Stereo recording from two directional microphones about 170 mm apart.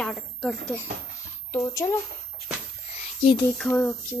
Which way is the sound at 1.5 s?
20° left (ahead or behind).